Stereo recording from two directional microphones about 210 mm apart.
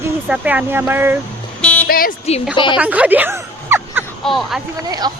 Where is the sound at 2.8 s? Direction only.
5° right (ahead or behind).